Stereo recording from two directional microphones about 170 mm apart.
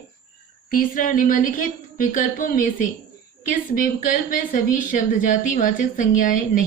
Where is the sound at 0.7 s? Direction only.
55° left (ahead or behind).